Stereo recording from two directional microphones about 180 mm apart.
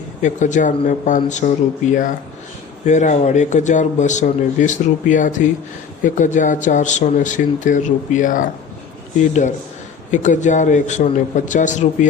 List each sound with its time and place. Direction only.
0.2 s a man's voice: 45° left (ahead or behind)
10.1 s a man's voice: 45° left (ahead or behind)